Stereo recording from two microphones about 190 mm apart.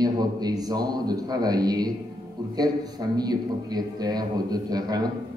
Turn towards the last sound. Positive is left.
turn(degrees=-20)  # may be behind; listen again after turning